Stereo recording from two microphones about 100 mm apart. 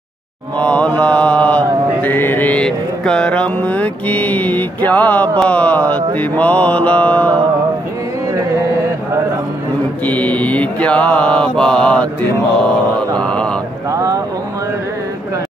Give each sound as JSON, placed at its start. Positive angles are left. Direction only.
{"t": 0.6, "sound": "mantra", "side_deg": 10}
{"t": 10.0, "sound": "mantra", "side_deg": 15}
{"t": 13.2, "sound": "mantra", "side_deg": 10}
{"t": 13.9, "sound": "vehicle", "side_deg": -35}